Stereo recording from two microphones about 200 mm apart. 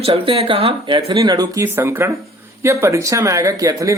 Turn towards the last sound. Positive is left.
turn(degrees=-15)  # may be behind; listen again after turning